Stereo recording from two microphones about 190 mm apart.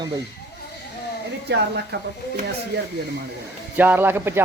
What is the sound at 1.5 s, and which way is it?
Speech, 65° right (ahead or behind).